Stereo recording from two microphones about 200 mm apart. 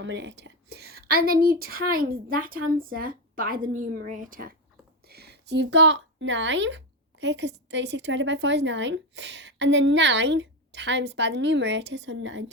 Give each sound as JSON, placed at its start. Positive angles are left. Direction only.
{"t": 0.0, "sound": "a woman's voice", "side_deg": -60}